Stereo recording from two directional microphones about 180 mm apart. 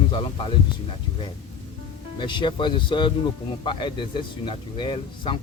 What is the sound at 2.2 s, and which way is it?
Speech, 25° left (ahead or behind).